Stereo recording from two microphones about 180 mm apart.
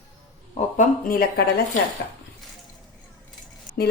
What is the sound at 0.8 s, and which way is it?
Speech, 55° left (ahead or behind).